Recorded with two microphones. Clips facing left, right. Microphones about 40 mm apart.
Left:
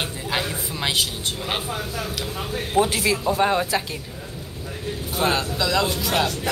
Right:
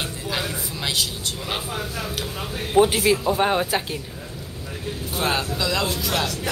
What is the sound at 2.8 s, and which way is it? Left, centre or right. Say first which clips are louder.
Speech: right 5 dB; centre.